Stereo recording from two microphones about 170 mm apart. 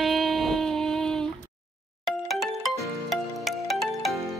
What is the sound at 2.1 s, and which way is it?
Music, centre (ahead or behind).